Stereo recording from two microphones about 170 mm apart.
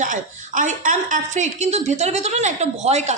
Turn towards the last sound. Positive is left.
turn(degrees=-40)  # may be behind; listen again after turning